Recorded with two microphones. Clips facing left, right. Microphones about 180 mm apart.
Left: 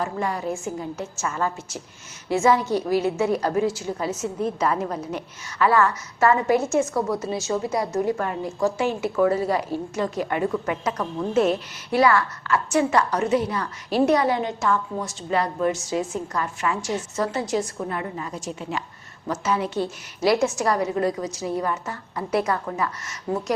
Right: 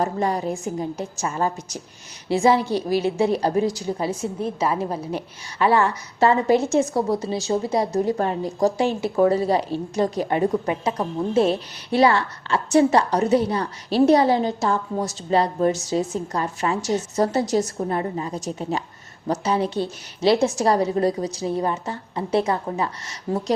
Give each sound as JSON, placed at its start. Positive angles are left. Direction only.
{"t": 0.0, "sound": "a woman's voice", "side_deg": -35}
{"t": 0.4, "sound": "a woman's voice", "side_deg": -15}
{"t": 1.0, "sound": "a woman's voice", "side_deg": -30}